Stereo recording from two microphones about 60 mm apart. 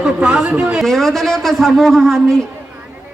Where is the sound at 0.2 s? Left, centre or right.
Centre.